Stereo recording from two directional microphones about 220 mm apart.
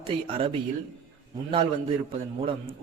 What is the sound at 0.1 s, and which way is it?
Speech, 25° right (ahead or behind).